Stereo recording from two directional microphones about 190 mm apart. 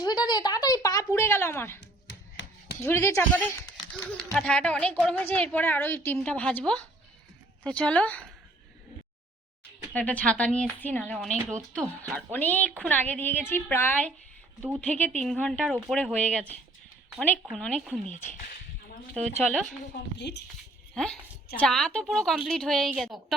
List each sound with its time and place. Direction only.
0.0 s a woman's voice: 20° left (ahead or behind)
2.3 s chopping: 80° left
2.8 s speech: 10° left (ahead or behind)
9.9 s speech: 10° left (ahead or behind)
19.1 s speech: 5° left (ahead or behind)
20.1 s speech: 65° left (ahead or behind)
20.9 s a woman's voice: 5° left (ahead or behind)